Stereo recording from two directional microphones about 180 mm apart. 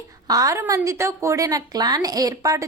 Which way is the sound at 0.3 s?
20° right (ahead or behind).